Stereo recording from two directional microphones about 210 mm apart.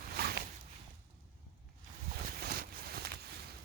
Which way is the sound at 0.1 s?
45° right (ahead or behind).